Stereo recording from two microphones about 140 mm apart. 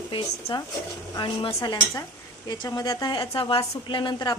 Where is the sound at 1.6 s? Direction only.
20° left (ahead or behind).